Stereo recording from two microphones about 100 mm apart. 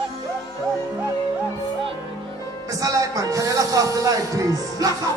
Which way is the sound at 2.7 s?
35° right (ahead or behind).